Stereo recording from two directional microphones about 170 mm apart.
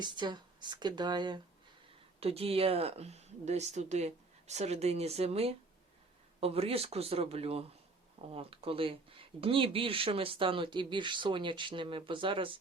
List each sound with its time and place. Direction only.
0.0 s speech: 25° right (ahead or behind)